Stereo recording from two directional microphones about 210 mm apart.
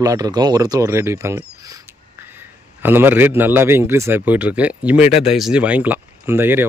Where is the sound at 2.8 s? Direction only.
10° right (ahead or behind).